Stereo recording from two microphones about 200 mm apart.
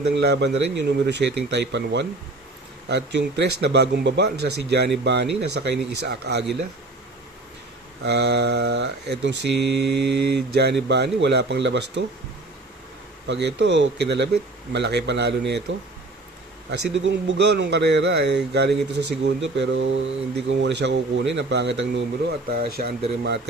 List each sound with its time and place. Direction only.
0.1 s speech: 55° right (ahead or behind)
8.0 s speech: 55° right (ahead or behind)
13.2 s speech: 60° right (ahead or behind)
16.9 s speech: 60° right (ahead or behind)